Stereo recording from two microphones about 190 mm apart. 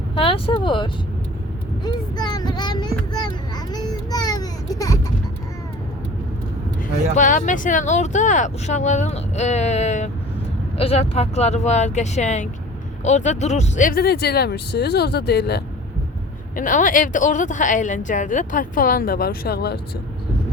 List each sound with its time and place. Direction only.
0.2 s child singing: 30° left (ahead or behind)
3.2 s a sound: 20° left (ahead or behind)
7.2 s speech: 45° left (ahead or behind); by 15.6 s 60° left (ahead or behind)
16.6 s a woman's voice: 45° left (ahead or behind)